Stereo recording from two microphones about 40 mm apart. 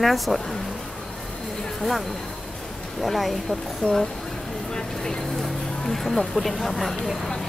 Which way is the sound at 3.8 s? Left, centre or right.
Left.